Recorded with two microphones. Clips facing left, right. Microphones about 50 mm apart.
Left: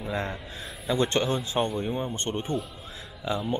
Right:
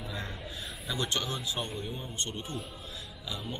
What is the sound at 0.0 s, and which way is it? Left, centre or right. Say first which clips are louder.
A man's voice: left 8 dB; left.